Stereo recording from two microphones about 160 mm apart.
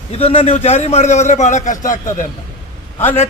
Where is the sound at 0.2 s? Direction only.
40° left (ahead or behind).